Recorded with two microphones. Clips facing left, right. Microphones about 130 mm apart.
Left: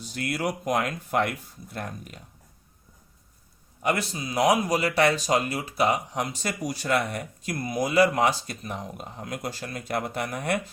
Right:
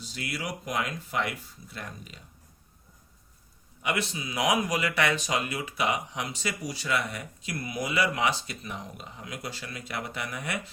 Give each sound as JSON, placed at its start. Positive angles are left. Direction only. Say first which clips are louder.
{"t": 0.0, "sound": "speech", "louder": "left 7 dB", "side_deg": 50}
{"t": 3.8, "sound": "speech", "louder": "left 4 dB", "side_deg": 40}